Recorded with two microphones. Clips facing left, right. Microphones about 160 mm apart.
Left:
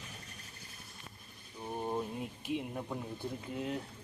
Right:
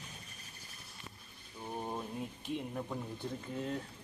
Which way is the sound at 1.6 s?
5° left (ahead or behind).